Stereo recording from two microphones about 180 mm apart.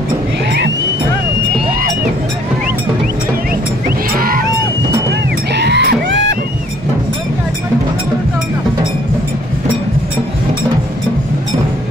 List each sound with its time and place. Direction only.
5.5 s music: 70° right (ahead or behind)